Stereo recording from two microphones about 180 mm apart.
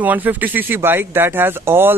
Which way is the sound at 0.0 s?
10° right (ahead or behind).